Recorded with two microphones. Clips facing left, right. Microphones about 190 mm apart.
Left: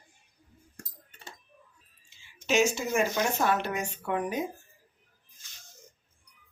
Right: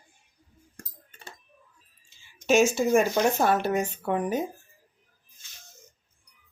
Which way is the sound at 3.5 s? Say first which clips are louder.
Right 5 dB; 40° right (ahead or behind).